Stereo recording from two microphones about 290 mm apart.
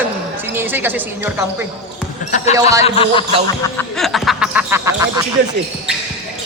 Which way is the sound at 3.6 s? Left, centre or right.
Centre.